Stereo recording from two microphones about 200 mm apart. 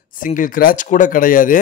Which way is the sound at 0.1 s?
40° left (ahead or behind).